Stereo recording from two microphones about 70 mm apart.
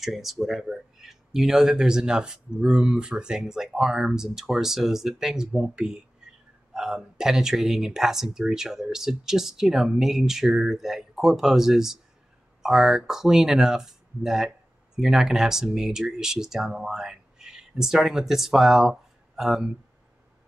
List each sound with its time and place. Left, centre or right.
0.0 s speech: centre
6.2 s hiccup: centre
6.7 s speech: centre